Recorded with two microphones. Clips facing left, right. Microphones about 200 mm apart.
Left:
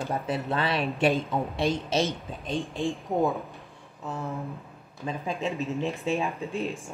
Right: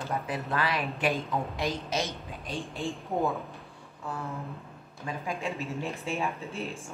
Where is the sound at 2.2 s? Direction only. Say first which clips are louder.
Left 3 dB; 30° left (ahead or behind).